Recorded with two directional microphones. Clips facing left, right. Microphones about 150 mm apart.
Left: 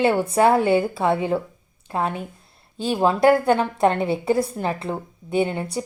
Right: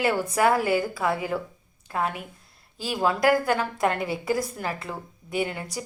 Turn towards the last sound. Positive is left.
turn(degrees=25)  # may be behind; listen again after turning